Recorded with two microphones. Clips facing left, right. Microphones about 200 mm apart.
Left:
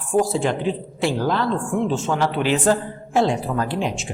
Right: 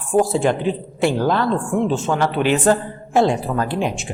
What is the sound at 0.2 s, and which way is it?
Speech, 55° right (ahead or behind).